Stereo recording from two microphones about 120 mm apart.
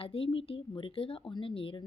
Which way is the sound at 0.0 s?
50° left (ahead or behind).